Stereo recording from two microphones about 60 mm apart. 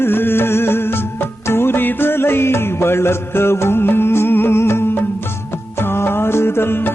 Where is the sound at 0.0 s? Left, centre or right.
Left.